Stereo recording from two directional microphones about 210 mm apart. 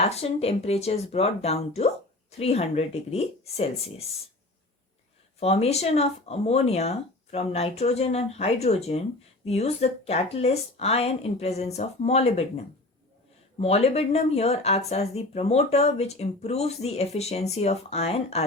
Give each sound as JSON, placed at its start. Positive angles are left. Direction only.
{"t": 0.0, "sound": "speech", "side_deg": 30}
{"t": 5.4, "sound": "speech", "side_deg": 30}
{"t": 13.6, "sound": "speech", "side_deg": 30}